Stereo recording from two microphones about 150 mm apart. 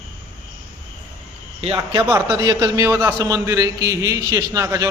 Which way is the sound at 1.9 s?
15° right (ahead or behind).